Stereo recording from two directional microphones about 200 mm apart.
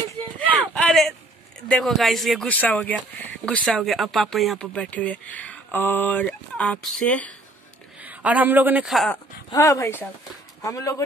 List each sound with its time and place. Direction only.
0.7 s a sound: centre (ahead or behind)
1.7 s speech: centre (ahead or behind)
8.0 s a woman's voice: 10° right (ahead or behind)
9.5 s speech: 15° left (ahead or behind)